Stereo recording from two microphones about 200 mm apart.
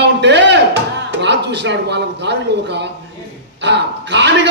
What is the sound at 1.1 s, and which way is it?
A man's voice, 60° right (ahead or behind).